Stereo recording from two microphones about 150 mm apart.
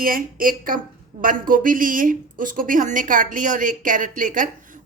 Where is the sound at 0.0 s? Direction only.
70° right (ahead or behind).